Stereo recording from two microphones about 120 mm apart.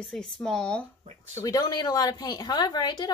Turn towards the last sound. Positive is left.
turn(degrees=35)  # may be behind; listen again after turning